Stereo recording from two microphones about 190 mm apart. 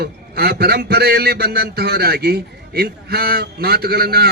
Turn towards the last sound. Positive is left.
turn(degrees=-55)  # may be behind; listen again after turning